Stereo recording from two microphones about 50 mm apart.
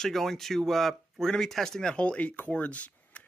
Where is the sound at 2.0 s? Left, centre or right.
Left.